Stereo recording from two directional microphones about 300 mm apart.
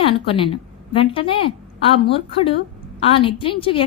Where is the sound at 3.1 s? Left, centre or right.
Centre.